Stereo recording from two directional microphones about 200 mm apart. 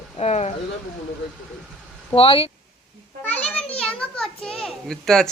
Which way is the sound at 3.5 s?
5° left (ahead or behind).